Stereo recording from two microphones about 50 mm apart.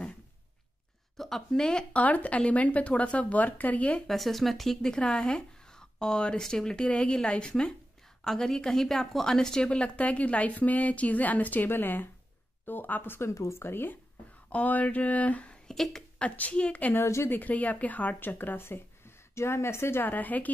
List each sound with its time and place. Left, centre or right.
1.1 s speech: centre
2.0 s a woman's voice: left
4.1 s a woman's voice: centre; by 13.2 s left
13.2 s a woman's voice: left
13.6 s speech: left
14.5 s speech: left
15.7 s speech: centre
16.2 s a woman's voice: left
18.6 s a woman's voice: left